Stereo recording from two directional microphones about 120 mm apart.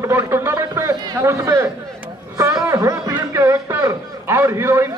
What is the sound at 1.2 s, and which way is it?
A man's voice, 20° right (ahead or behind).